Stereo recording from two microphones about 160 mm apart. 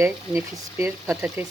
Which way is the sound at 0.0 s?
15° right (ahead or behind).